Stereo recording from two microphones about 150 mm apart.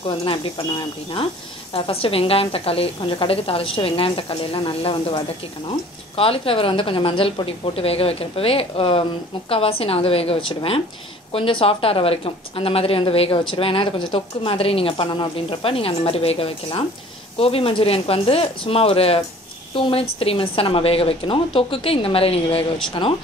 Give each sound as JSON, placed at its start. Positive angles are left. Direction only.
{"t": 0.0, "sound": "speech", "side_deg": 35}
{"t": 1.7, "sound": "speech", "side_deg": 40}